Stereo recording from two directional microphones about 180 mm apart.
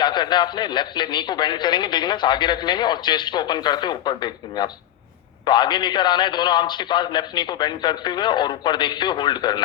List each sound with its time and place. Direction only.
0.0 s a man's voice: 25° left (ahead or behind)